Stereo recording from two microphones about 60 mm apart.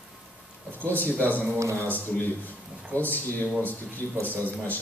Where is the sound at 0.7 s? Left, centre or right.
Left.